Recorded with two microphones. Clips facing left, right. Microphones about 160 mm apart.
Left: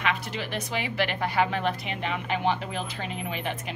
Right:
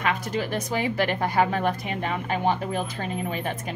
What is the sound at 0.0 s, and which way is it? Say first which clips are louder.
Speech: right 4 dB; 45° right (ahead or behind).